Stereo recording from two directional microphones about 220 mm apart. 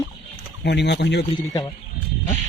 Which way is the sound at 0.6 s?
50° left (ahead or behind).